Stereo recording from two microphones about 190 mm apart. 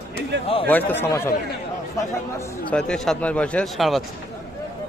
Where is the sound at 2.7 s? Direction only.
5° left (ahead or behind).